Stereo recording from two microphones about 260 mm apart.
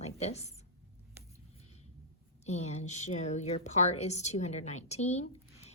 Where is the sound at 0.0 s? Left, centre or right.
Left.